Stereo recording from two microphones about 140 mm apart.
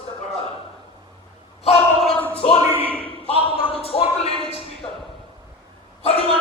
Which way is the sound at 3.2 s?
45° left (ahead or behind).